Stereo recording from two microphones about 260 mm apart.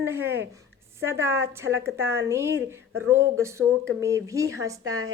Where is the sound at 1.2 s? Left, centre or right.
Centre.